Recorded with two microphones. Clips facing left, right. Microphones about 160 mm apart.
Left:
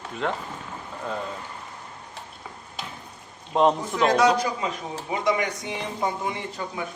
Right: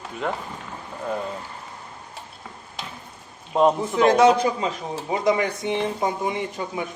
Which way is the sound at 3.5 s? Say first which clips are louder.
Right 2 dB; 5° right (ahead or behind).